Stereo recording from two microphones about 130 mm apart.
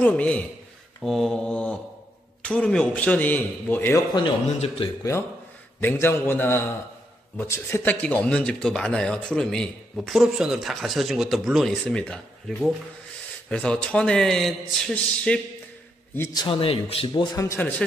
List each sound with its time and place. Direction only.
0.0 s a man's voice: 10° left (ahead or behind)
4.6 s speech: 45° left (ahead or behind)
5.8 s a man's voice: 15° left (ahead or behind)
16.3 s speech: 40° left (ahead or behind)
17.4 s a man's voice: 20° left (ahead or behind)